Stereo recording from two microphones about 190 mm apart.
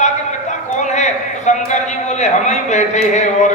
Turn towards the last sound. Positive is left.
turn(degrees=40)  # may be behind; listen again after turning